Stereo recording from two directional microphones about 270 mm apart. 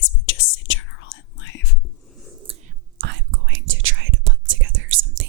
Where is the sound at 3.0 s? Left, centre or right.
Right.